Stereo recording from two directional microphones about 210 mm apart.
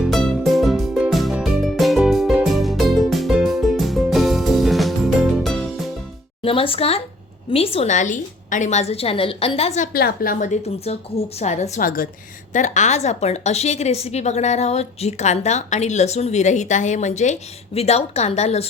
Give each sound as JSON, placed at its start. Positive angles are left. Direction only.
{"t": 0.0, "sound": "music", "side_deg": 0}
{"t": 6.4, "sound": "a woman's voice", "side_deg": 25}